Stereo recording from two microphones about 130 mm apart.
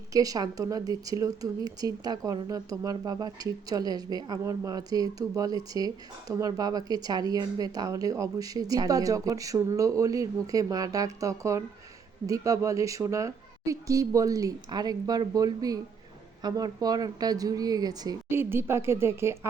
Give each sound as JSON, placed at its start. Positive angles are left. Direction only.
{"t": 0.1, "sound": "a woman's voice", "side_deg": -30}
{"t": 18.3, "sound": "a woman's voice", "side_deg": -15}